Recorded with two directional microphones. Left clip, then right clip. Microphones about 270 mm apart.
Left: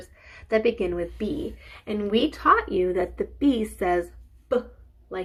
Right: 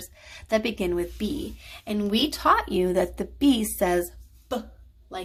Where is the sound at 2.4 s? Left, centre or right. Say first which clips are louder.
Left 1 dB; right.